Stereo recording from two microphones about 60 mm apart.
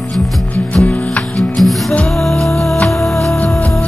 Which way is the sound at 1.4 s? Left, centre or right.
Centre.